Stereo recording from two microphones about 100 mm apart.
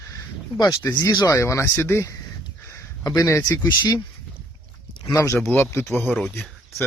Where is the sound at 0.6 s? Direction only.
35° left (ahead or behind).